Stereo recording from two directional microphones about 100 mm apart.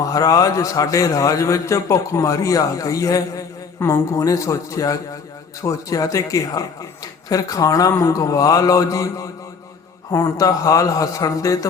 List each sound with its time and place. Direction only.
0.0 s a man's voice: 35° left (ahead or behind)